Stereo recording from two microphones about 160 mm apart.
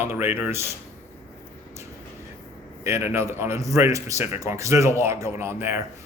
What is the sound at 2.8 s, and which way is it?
Speech, 15° right (ahead or behind).